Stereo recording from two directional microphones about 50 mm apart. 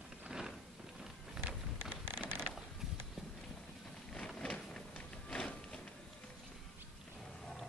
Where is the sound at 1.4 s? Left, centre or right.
Right.